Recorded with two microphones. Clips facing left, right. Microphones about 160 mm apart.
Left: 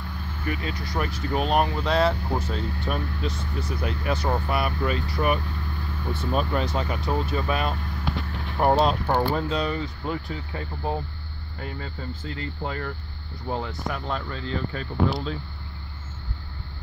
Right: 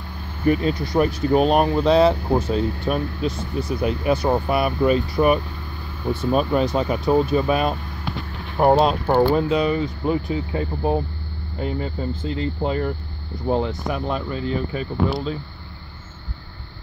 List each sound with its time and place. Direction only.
0.5 s speech: 30° right (ahead or behind); by 15.3 s 10° right (ahead or behind)